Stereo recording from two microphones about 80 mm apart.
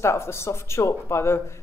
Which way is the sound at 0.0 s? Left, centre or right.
Left.